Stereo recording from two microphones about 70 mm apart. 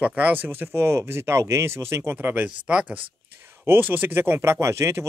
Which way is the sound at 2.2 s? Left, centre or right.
Right.